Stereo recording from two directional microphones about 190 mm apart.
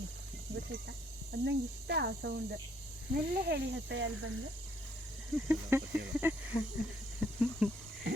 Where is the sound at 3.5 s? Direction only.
75° right (ahead or behind).